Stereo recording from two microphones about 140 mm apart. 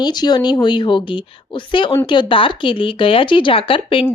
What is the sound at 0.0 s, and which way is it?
Speech, 30° left (ahead or behind).